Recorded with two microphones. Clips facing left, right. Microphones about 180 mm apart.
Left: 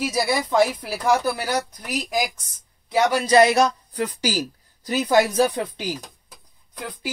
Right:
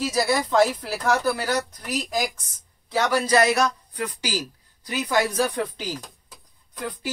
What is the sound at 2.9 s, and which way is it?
Speech, 15° left (ahead or behind).